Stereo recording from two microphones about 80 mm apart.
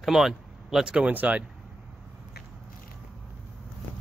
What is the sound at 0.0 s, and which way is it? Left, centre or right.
Speech, centre.